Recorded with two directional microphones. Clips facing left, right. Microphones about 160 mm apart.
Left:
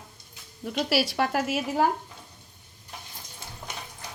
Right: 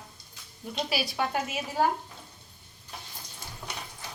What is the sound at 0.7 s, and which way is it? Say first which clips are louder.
Speech: left 6 dB; 75° left (ahead or behind).